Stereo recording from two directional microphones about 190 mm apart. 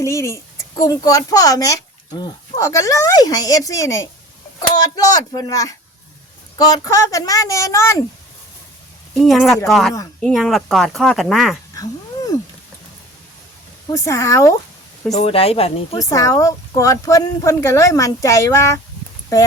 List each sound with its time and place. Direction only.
0.0 s speech: 15° left (ahead or behind)
9.2 s speech: centre (ahead or behind)
11.8 s a sound: 20° left (ahead or behind)
13.9 s speech: 15° left (ahead or behind)
15.1 s speech: 35° left (ahead or behind)
16.0 s speech: 15° left (ahead or behind)